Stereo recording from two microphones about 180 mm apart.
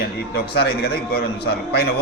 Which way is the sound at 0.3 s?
60° left (ahead or behind).